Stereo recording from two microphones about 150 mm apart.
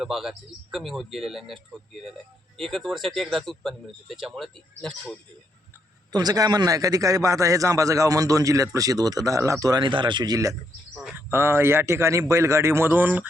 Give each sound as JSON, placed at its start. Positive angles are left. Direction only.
{"t": 0.0, "sound": "speech", "side_deg": 0}
{"t": 6.1, "sound": "a man's voice", "side_deg": -25}